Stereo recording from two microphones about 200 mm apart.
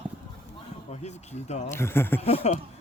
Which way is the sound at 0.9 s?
35° left (ahead or behind).